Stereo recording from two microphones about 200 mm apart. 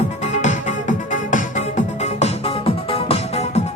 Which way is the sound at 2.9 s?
30° left (ahead or behind).